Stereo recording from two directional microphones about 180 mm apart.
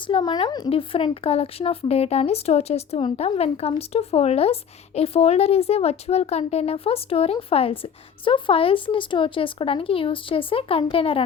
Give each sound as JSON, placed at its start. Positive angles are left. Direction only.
{"t": 0.1, "sound": "speech", "side_deg": 30}